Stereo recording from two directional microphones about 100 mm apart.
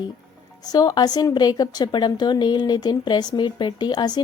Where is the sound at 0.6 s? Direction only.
40° left (ahead or behind).